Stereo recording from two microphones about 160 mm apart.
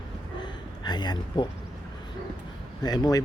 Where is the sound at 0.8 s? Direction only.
25° left (ahead or behind).